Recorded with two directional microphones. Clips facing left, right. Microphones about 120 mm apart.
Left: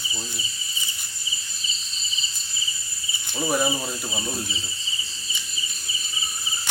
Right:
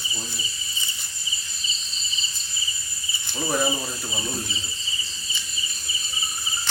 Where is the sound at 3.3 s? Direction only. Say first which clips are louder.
Left 1 dB; 10° left (ahead or behind).